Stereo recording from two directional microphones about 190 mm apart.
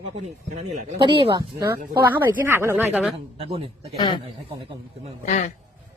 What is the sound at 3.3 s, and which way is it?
Speech, 30° right (ahead or behind).